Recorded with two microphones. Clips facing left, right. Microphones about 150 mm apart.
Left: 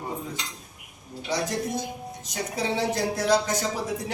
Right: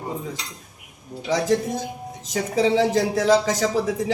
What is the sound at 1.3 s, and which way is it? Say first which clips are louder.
Speech: right 6 dB; 90° right.